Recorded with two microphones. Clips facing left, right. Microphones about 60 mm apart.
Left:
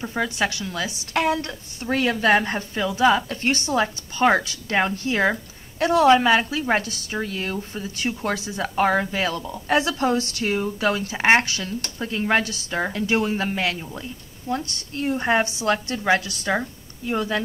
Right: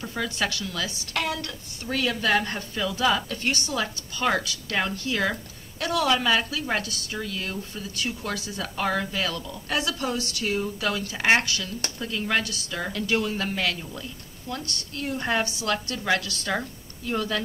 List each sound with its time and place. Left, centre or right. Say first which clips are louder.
0.0 s a woman's voice: left 4 dB; left